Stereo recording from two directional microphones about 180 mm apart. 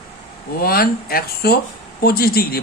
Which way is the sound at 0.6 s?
55° left (ahead or behind).